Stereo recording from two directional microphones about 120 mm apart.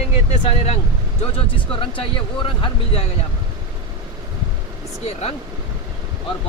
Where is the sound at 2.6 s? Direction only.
50° left (ahead or behind).